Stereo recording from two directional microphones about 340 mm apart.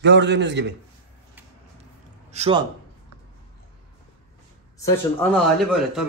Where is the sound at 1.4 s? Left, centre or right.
Centre.